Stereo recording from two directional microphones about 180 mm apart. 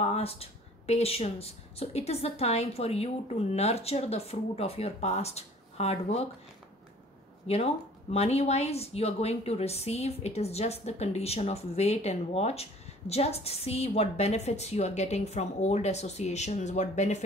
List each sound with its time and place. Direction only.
0.0 s speech: 35° left (ahead or behind)
7.4 s speech: 35° left (ahead or behind)